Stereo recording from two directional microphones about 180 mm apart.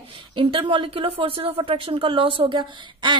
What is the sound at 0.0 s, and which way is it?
Speech, 30° right (ahead or behind).